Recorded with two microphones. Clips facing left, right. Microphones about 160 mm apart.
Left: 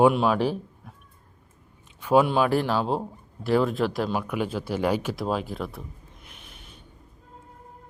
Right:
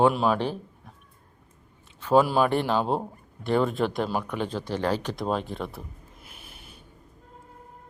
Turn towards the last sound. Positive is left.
turn(degrees=-5)  # may be behind; listen again after turning